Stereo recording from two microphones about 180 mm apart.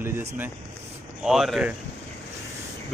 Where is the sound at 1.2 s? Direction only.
Centre (ahead or behind).